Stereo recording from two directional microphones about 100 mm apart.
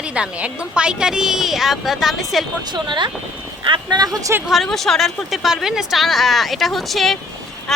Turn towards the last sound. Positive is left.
turn(degrees=0)  # may be behind; listen again after turning